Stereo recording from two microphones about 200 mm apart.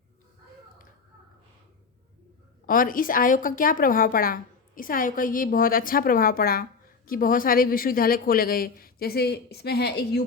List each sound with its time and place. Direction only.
2.6 s a woman's voice: 45° left (ahead or behind)